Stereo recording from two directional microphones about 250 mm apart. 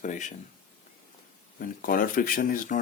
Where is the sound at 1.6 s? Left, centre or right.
Left.